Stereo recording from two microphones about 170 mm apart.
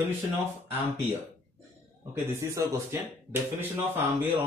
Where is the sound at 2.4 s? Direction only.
20° right (ahead or behind).